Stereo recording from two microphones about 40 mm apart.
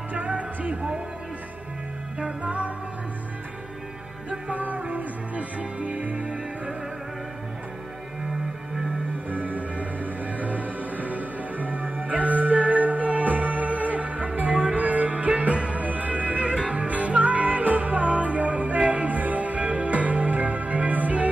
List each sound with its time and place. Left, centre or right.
0.1 s music: right
2.1 s music: right
4.3 s music: right
9.3 s music: right